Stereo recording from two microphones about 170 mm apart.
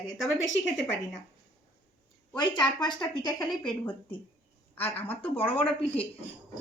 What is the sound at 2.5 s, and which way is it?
A woman's voice, 25° left (ahead or behind).